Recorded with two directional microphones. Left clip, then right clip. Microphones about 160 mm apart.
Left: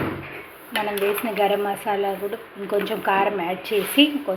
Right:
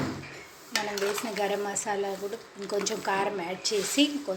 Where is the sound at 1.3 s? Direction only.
10° right (ahead or behind).